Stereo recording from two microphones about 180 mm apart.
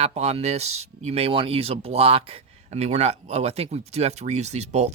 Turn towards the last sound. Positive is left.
turn(degrees=-40)  # may be behind; listen again after turning